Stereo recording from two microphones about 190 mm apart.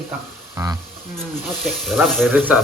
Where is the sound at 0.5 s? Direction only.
15° right (ahead or behind).